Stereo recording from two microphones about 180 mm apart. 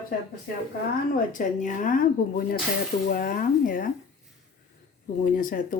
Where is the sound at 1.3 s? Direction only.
45° left (ahead or behind).